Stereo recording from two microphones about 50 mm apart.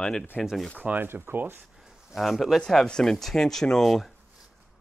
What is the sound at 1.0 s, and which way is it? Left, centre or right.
Speech, right.